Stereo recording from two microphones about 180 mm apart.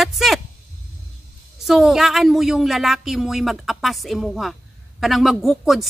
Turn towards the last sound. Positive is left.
turn(degrees=0)  # may be behind; listen again after turning